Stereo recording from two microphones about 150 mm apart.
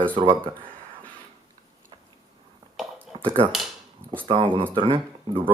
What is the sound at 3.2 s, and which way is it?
Speech, 35° right (ahead or behind).